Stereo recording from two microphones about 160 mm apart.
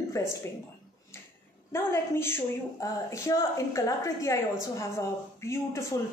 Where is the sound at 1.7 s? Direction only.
15° left (ahead or behind).